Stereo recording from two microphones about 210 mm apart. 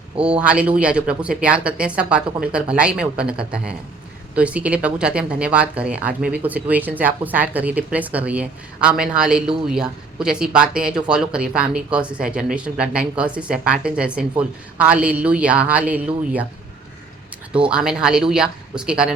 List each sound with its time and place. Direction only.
0.2 s speech: 5° right (ahead or behind)
17.5 s speech: 5° right (ahead or behind)